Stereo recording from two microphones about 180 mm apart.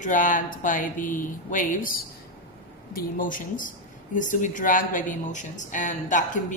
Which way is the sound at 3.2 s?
50° left (ahead or behind).